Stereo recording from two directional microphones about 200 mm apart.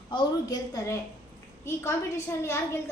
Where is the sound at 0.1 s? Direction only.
20° left (ahead or behind).